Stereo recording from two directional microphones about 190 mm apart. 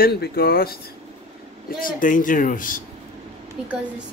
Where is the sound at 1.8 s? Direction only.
45° left (ahead or behind).